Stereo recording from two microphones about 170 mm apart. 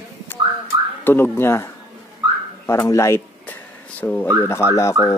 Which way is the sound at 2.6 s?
15° left (ahead or behind).